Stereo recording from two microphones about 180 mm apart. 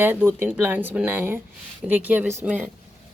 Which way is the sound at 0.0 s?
10° right (ahead or behind).